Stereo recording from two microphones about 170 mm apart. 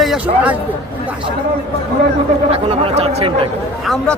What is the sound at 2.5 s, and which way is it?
Speech, 35° right (ahead or behind).